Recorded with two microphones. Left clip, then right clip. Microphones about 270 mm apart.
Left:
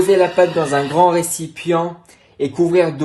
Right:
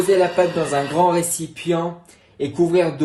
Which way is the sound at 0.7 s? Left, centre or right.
Left.